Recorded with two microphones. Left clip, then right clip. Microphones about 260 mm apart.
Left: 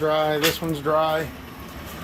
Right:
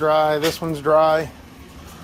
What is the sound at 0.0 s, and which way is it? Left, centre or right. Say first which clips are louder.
Speech: right 3 dB; centre.